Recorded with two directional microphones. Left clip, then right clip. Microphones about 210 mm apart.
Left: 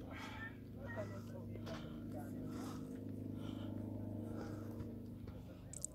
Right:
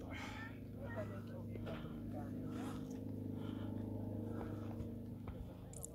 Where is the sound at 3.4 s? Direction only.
Centre (ahead or behind).